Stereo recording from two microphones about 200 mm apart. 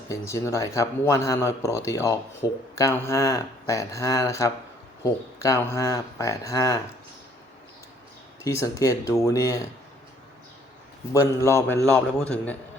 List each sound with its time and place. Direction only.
0.1 s speech: 15° left (ahead or behind)
8.4 s speech: 15° left (ahead or behind)
11.1 s a man's voice: 15° left (ahead or behind)